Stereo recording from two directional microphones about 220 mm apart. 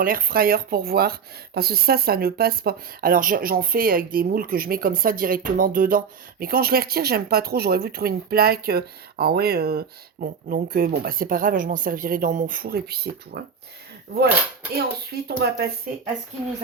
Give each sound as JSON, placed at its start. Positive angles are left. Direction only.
{"t": 0.0, "sound": "speech", "side_deg": -40}
{"t": 14.8, "sound": "speech", "side_deg": -45}